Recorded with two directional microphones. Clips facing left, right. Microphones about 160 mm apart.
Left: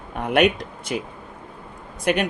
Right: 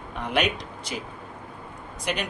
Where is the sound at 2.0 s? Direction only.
55° left (ahead or behind).